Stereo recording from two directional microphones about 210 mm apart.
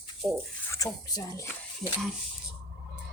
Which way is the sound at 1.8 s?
Centre (ahead or behind).